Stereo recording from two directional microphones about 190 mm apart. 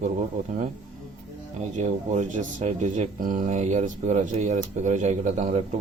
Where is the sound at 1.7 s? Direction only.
40° right (ahead or behind).